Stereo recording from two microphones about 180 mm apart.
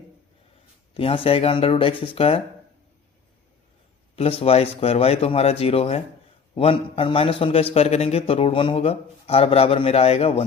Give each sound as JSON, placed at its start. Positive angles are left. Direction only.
{"t": 0.9, "sound": "a man's voice", "side_deg": 30}
{"t": 4.1, "sound": "a man's voice", "side_deg": 35}